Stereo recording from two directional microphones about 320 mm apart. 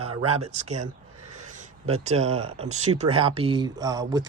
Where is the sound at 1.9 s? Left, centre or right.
Centre.